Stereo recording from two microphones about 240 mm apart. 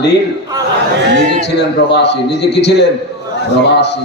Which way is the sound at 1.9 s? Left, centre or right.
Left.